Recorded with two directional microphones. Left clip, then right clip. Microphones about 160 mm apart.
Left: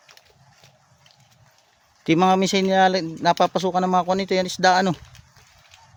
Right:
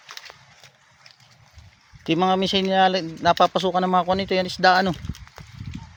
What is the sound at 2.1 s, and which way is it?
Speech, 50° left (ahead or behind).